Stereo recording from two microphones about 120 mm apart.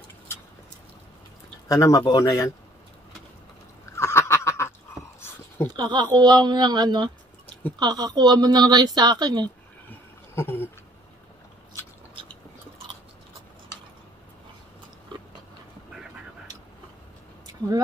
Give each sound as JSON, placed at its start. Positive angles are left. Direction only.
{"t": 1.7, "sound": "a man's voice", "side_deg": 25}
{"t": 3.9, "sound": "duck", "side_deg": 20}
{"t": 5.8, "sound": "a woman's voice", "side_deg": -35}
{"t": 9.8, "sound": "a sound", "side_deg": 20}